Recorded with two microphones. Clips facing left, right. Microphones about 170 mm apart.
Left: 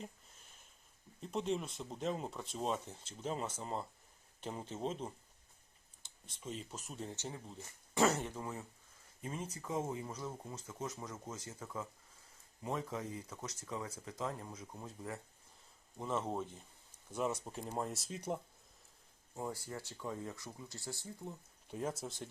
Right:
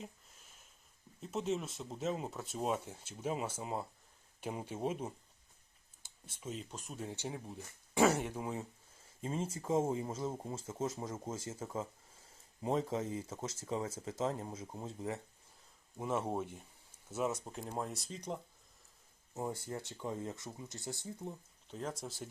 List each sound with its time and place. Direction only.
1.2 s speech: 5° right (ahead or behind)
7.1 s speech: 15° right (ahead or behind)
9.2 s speech: 30° right (ahead or behind)
16.0 s speech: 10° right (ahead or behind); by 18.3 s 5° left (ahead or behind)
19.3 s speech: 20° right (ahead or behind)
21.7 s speech: 10° left (ahead or behind)